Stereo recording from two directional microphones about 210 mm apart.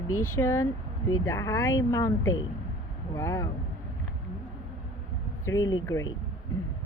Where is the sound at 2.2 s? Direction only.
70° left (ahead or behind).